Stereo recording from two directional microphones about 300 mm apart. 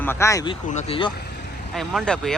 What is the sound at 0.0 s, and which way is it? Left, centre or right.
Speech, centre.